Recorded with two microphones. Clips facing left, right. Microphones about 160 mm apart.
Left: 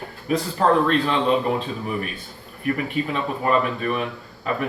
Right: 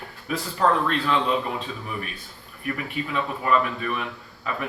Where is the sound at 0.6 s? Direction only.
40° left (ahead or behind).